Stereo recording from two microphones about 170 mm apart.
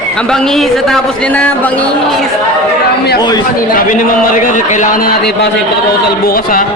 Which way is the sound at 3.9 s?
50° left (ahead or behind).